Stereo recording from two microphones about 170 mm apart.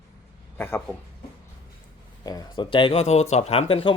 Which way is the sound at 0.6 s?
10° left (ahead or behind).